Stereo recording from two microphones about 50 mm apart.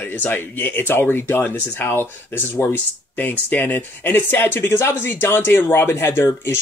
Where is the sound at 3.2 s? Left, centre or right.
Left.